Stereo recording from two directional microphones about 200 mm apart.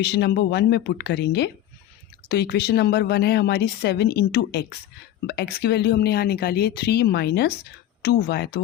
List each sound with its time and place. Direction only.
0.0 s a woman's voice: 55° left (ahead or behind)